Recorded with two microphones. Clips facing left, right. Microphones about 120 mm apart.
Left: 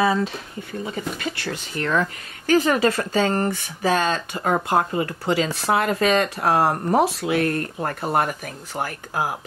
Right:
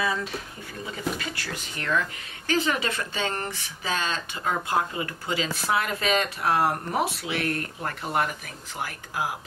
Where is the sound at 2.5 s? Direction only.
45° left (ahead or behind).